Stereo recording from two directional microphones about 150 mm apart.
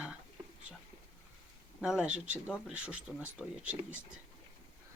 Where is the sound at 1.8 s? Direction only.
5° right (ahead or behind).